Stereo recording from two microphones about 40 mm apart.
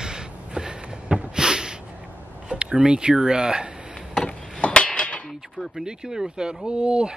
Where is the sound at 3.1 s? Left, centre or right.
Centre.